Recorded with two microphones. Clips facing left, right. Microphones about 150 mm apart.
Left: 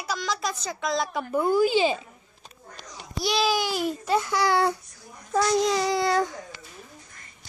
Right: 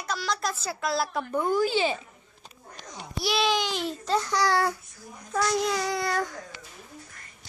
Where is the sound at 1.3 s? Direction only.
10° left (ahead or behind).